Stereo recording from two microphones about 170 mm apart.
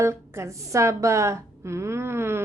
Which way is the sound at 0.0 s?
15° right (ahead or behind).